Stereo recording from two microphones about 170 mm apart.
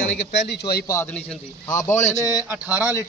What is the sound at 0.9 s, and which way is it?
Speech, 15° left (ahead or behind).